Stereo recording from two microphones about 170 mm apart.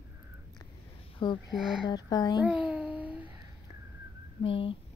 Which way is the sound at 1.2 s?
30° left (ahead or behind).